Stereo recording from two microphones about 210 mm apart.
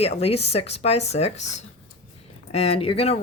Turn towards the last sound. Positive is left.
turn(degrees=30)  # may be behind; listen again after turning